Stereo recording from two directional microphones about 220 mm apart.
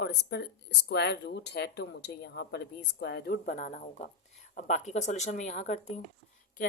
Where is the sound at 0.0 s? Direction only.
50° left (ahead or behind).